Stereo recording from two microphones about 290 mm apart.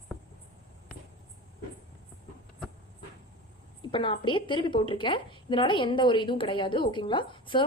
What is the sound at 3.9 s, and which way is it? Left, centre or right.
A woman's voice, centre.